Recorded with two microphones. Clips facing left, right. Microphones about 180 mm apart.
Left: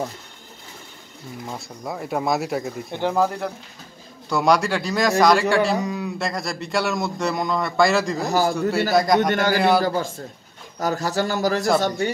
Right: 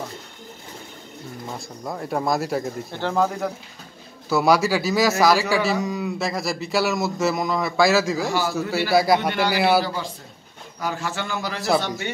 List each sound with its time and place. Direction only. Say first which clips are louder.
1.9 s a man's voice: even; centre (ahead or behind)
2.9 s speech: left 2 dB; 15° left (ahead or behind)
4.3 s a man's voice: right 1 dB; 5° right (ahead or behind)
8.3 s a man's voice: left 4 dB; 40° left (ahead or behind)
8.5 s a man's voice: left 1 dB; centre (ahead or behind)
9.3 s a man's voice: left 2 dB; 45° left (ahead or behind)
9.6 s a man's voice: right 1 dB; 5° right (ahead or behind)
9.8 s a man's voice: left 6 dB; 45° left (ahead or behind)